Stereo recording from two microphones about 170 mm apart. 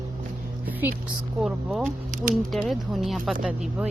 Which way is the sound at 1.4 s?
5° right (ahead or behind).